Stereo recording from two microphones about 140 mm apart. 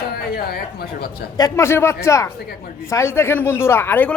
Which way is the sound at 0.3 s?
90° left.